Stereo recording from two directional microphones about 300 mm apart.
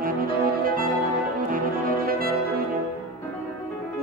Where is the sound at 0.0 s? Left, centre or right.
Right.